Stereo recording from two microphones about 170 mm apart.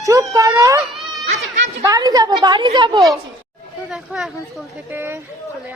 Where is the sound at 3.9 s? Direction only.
5° right (ahead or behind).